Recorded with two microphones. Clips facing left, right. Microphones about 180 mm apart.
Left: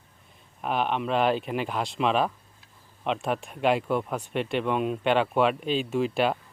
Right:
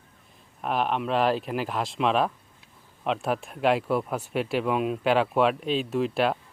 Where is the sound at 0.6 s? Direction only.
Centre (ahead or behind).